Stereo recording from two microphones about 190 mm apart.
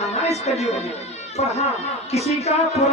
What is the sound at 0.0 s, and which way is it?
Speech, 35° left (ahead or behind).